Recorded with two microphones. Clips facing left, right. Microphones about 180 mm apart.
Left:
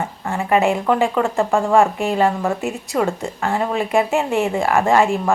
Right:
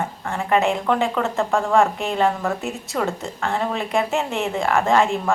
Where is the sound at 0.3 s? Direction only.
10° left (ahead or behind).